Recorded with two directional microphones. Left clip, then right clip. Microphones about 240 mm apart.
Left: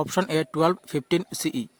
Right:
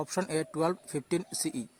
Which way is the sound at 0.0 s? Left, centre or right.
Left.